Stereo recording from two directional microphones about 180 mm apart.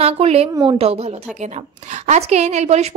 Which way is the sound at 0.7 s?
35° right (ahead or behind).